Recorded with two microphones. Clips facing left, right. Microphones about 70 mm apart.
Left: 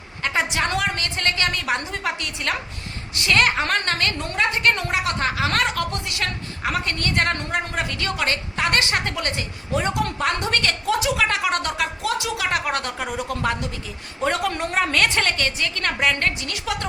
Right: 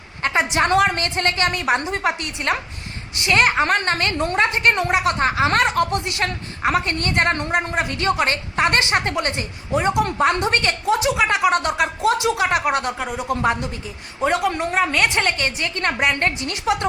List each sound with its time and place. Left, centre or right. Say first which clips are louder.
0.2 s a woman's voice: right 4 dB; right
13.0 s speech: right 1 dB; centre
13.2 s a woman's voice: right 6 dB; right
14.2 s a woman's voice: right 3 dB; centre; by 16.7 s right